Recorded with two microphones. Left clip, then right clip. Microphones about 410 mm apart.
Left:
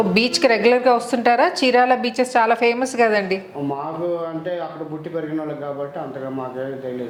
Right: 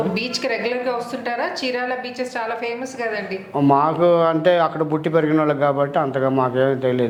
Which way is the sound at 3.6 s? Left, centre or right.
Right.